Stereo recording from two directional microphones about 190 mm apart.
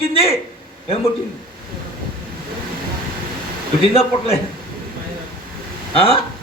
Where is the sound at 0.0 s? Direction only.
30° left (ahead or behind).